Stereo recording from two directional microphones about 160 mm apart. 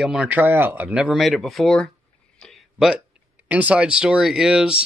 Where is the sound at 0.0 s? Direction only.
5° right (ahead or behind).